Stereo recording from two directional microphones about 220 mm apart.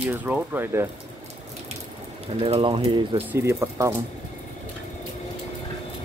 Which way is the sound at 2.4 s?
25° right (ahead or behind).